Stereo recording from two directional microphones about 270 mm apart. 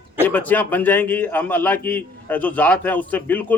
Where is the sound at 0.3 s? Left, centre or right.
Centre.